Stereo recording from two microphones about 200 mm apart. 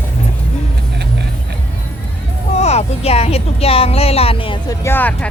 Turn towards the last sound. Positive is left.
turn(degrees=10)  # may be behind; listen again after turning